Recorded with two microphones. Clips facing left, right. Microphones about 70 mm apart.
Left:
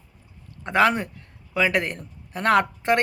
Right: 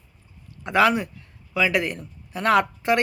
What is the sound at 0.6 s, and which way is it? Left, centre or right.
Speech, left.